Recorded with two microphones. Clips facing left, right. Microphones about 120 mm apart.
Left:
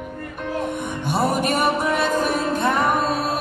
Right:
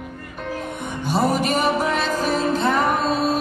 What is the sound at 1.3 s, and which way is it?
Music, 50° left (ahead or behind).